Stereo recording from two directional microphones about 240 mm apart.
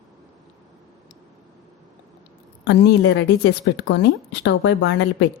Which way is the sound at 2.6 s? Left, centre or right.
Left.